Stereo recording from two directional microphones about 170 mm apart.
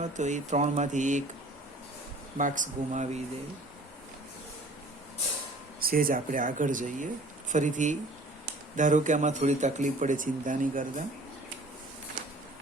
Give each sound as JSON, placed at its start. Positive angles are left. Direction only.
{"t": 0.0, "sound": "speech", "side_deg": -45}
{"t": 2.4, "sound": "speech", "side_deg": -45}
{"t": 5.8, "sound": "speech", "side_deg": -60}